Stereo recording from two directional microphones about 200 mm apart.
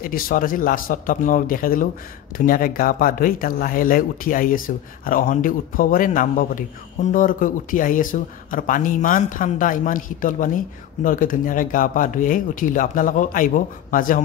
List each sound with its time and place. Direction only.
0.0 s speech: 45° left (ahead or behind)